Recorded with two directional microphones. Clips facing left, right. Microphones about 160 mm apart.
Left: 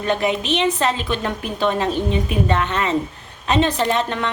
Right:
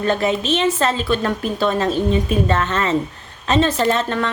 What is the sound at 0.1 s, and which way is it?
A woman's voice, 15° left (ahead or behind).